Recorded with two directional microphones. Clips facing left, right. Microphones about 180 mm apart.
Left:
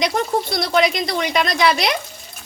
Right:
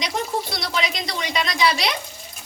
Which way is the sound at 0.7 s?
55° left (ahead or behind).